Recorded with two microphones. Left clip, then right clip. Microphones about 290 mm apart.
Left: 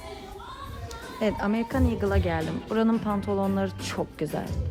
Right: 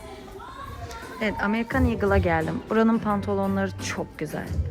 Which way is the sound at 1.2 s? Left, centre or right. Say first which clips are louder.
Right 1 dB; centre.